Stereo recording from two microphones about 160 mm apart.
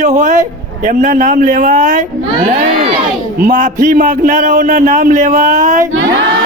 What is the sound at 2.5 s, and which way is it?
Crowd, 70° right (ahead or behind).